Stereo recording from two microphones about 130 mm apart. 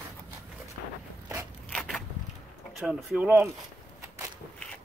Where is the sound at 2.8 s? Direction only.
5° right (ahead or behind).